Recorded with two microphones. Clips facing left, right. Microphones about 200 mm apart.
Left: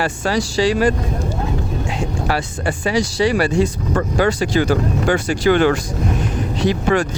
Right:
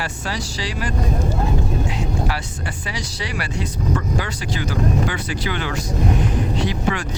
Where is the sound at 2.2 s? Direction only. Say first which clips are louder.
Left 6 dB; 50° left (ahead or behind).